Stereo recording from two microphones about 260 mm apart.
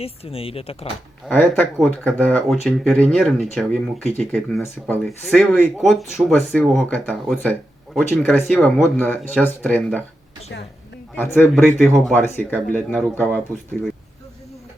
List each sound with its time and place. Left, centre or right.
0.0 s speech: left
1.2 s speech: centre
11.1 s speech: centre